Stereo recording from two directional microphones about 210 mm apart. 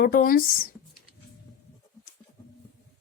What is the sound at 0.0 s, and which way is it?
Speech, 40° left (ahead or behind).